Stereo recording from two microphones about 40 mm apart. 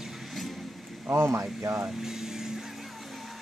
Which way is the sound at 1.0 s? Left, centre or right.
Right.